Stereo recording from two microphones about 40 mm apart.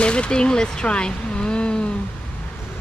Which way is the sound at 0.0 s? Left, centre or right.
Left.